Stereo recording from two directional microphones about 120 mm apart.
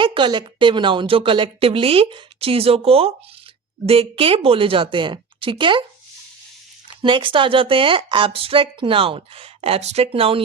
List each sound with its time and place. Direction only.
0.0 s speech: 40° right (ahead or behind)
6.8 s speech: 45° right (ahead or behind)